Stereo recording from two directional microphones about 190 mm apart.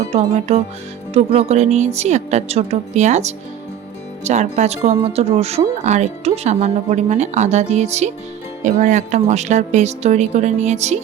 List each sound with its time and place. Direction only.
0.1 s speech: 35° right (ahead or behind)